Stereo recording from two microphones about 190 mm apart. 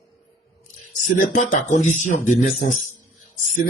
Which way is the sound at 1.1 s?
40° left (ahead or behind).